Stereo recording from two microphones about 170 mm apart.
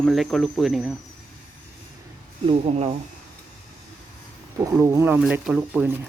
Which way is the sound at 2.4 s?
40° right (ahead or behind).